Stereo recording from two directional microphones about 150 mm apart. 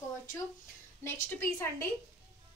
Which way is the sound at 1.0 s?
20° left (ahead or behind).